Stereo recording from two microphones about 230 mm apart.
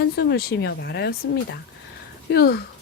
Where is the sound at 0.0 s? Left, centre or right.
Left.